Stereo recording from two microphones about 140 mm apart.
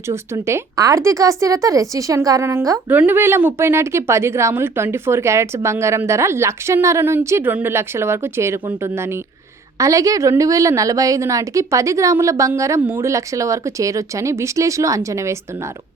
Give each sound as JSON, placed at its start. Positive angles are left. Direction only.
{"t": 0.1, "sound": "a woman's voice", "side_deg": -20}